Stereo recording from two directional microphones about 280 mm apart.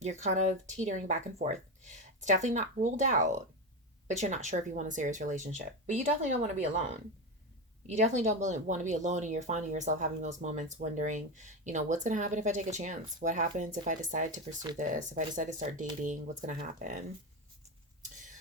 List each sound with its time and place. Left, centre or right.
0.0 s speech: right
7.9 s speech: right
14.5 s speech: centre
14.8 s speech: right